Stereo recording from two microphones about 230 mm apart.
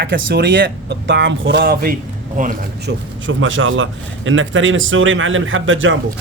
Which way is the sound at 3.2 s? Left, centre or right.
Right.